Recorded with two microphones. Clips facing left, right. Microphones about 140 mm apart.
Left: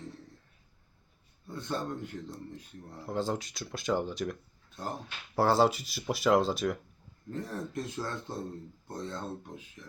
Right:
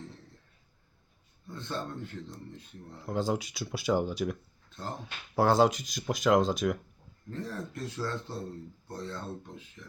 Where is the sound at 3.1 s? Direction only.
Centre (ahead or behind).